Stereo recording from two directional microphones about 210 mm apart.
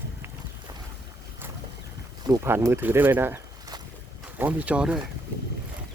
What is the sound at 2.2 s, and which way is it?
Speech, 15° right (ahead or behind).